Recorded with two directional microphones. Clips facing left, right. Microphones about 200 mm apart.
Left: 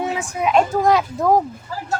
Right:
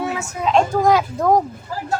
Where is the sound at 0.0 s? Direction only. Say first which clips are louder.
Left 1 dB; 20° left (ahead or behind).